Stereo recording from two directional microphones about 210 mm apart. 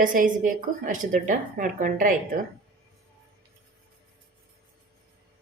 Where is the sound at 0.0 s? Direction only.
40° right (ahead or behind).